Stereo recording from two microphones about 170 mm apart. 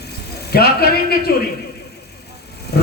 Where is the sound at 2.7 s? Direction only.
70° left (ahead or behind).